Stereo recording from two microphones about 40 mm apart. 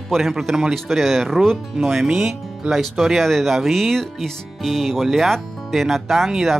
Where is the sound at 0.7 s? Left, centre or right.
Centre.